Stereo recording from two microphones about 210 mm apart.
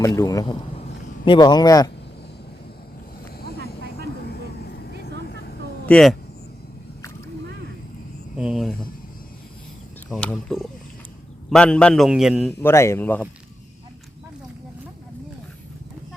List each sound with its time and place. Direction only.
0.2 s speech: 15° left (ahead or behind)
3.4 s vehicle: 50° left (ahead or behind)
5.8 s speech: 5° left (ahead or behind)
8.4 s a man's voice: centre (ahead or behind)
10.1 s a man's voice: 5° left (ahead or behind)
12.5 s speech: 10° left (ahead or behind)